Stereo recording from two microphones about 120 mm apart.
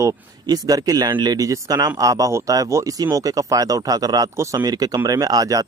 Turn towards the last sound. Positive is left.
turn(degrees=-30)  # may be behind; listen again after turning